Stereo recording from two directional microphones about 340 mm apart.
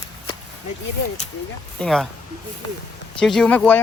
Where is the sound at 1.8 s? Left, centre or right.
Centre.